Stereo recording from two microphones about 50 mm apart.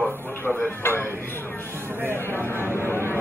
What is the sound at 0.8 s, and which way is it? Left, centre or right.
Speech, left.